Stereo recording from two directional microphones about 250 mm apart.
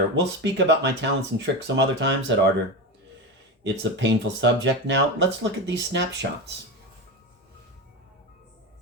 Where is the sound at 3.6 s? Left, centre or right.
Right.